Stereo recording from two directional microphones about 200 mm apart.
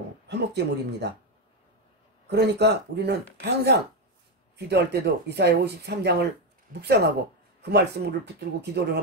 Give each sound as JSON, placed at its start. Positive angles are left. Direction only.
{"t": 0.3, "sound": "speech", "side_deg": -55}
{"t": 2.2, "sound": "speech", "side_deg": -55}
{"t": 7.7, "sound": "speech", "side_deg": -55}